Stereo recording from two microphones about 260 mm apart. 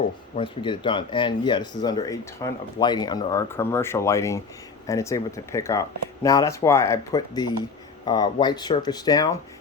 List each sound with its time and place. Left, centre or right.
0.3 s speech: centre